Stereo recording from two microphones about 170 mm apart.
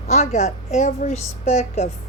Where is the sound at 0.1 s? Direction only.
40° left (ahead or behind).